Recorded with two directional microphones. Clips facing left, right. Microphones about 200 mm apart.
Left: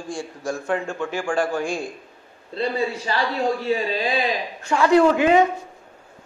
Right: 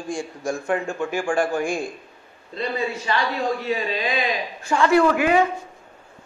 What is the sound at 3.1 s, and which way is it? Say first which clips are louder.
A man's voice: even; 35° left (ahead or behind).